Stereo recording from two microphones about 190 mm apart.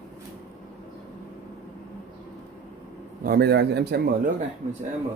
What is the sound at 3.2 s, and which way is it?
A man's voice, 55° right (ahead or behind).